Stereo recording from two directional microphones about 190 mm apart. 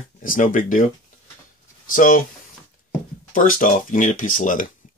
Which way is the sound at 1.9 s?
45° left (ahead or behind).